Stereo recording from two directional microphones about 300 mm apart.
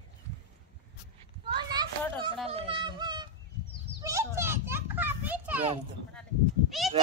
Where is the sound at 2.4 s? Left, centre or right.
Centre.